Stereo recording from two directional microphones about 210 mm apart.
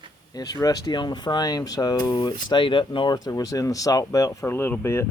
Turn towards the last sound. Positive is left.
turn(degrees=10)  # may be behind; listen again after turning